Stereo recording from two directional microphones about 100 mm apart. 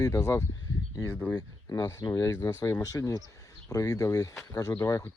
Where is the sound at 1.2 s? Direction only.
20° left (ahead or behind).